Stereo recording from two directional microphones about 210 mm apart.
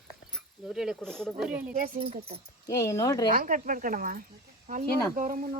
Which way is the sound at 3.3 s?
40° right (ahead or behind).